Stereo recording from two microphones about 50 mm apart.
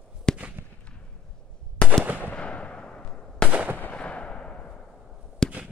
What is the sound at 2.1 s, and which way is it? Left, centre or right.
Fireworks, right.